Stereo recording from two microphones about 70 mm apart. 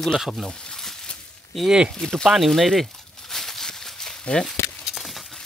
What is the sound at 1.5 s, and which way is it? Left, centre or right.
Speech, centre.